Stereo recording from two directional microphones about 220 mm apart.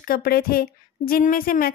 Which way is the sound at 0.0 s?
40° left (ahead or behind).